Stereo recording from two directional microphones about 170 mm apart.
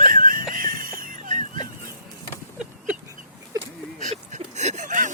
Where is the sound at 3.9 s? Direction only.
45° right (ahead or behind).